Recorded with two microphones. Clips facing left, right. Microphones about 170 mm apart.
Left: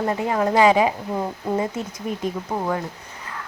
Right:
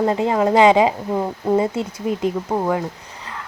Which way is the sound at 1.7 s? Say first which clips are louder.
Right 5 dB; 90° right.